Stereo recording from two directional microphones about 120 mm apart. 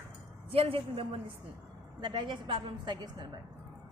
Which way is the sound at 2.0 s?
40° right (ahead or behind).